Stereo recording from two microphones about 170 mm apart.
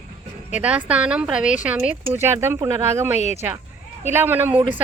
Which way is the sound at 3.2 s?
40° left (ahead or behind).